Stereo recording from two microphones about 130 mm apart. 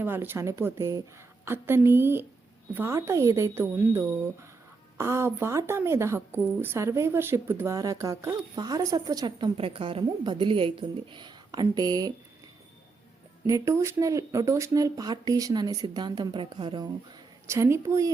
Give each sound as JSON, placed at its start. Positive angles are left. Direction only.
{"t": 0.0, "sound": "a woman's voice", "side_deg": -15}
{"t": 13.5, "sound": "a woman's voice", "side_deg": -25}
{"t": 17.4, "sound": "a woman's voice", "side_deg": -20}